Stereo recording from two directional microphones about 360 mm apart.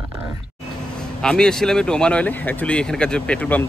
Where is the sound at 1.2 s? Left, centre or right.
Centre.